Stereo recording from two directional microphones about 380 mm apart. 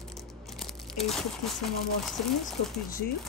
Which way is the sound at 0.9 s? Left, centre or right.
Centre.